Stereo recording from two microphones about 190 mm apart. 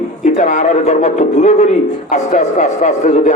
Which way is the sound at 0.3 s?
40° left (ahead or behind).